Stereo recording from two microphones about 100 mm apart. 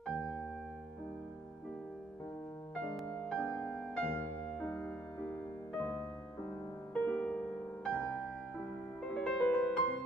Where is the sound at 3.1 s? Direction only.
10° left (ahead or behind).